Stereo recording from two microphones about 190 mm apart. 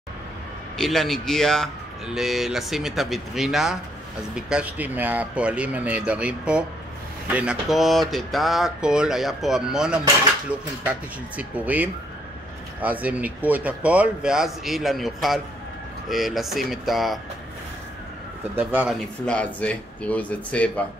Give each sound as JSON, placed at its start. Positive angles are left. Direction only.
{"t": 0.7, "sound": "speech", "side_deg": 0}
{"t": 18.6, "sound": "speech", "side_deg": -10}